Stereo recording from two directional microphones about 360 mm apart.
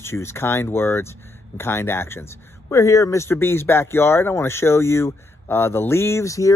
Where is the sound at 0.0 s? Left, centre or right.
Centre.